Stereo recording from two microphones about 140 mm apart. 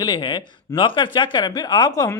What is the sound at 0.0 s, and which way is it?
Speech, 35° left (ahead or behind).